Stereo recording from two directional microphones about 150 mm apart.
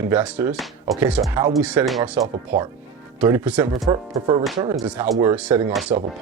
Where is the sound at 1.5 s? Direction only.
5° right (ahead or behind).